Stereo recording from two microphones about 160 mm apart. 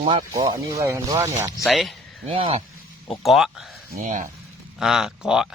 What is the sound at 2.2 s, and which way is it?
Speech, 35° right (ahead or behind).